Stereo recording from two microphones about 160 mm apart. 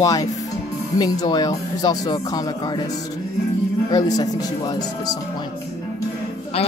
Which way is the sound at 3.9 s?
25° left (ahead or behind).